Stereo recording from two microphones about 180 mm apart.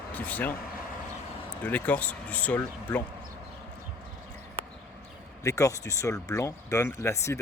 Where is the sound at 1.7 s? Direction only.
10° left (ahead or behind).